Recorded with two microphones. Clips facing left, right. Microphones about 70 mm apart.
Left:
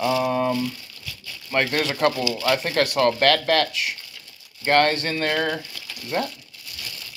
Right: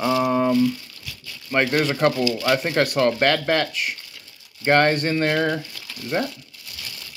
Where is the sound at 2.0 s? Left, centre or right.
Right.